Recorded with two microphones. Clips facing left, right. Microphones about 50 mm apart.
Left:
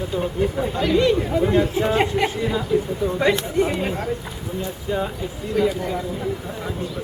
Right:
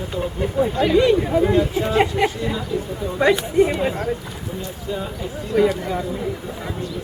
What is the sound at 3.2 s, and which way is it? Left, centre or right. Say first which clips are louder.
Speech: right 5 dB; centre.